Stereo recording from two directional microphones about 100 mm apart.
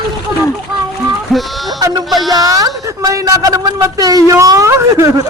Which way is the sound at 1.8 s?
40° right (ahead or behind).